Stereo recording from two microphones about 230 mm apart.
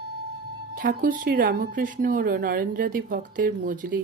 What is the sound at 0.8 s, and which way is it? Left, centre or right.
Speech, right.